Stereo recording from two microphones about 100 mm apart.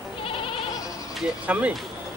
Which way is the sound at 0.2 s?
65° left (ahead or behind).